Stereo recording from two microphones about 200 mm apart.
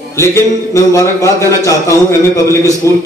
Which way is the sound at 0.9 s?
15° left (ahead or behind).